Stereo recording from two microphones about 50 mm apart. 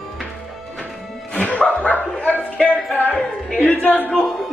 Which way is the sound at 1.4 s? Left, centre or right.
Left.